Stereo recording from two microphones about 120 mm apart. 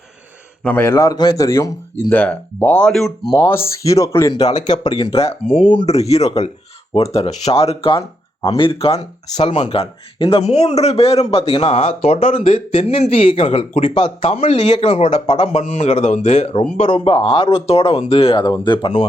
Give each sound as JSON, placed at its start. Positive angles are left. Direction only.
{"t": 0.6, "sound": "speech", "side_deg": 15}
{"t": 1.0, "sound": "a man's voice", "side_deg": 35}
{"t": 1.5, "sound": "speech", "side_deg": 25}
{"t": 3.3, "sound": "speech", "side_deg": 20}
{"t": 4.4, "sound": "speech", "side_deg": 70}
{"t": 5.5, "sound": "speech", "side_deg": 40}
{"t": 5.8, "sound": "speech", "side_deg": 65}
{"t": 9.6, "sound": "speech", "side_deg": 50}
{"t": 16.9, "sound": "a man's voice", "side_deg": 50}